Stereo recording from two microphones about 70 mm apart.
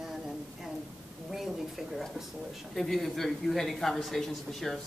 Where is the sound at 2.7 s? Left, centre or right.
Centre.